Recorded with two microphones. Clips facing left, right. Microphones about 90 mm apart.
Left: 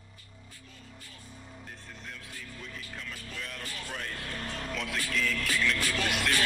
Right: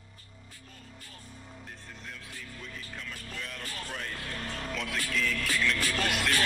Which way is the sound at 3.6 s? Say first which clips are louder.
Right 1 dB; 40° right (ahead or behind).